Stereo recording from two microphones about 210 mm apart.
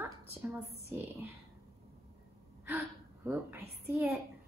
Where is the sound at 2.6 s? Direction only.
10° right (ahead or behind).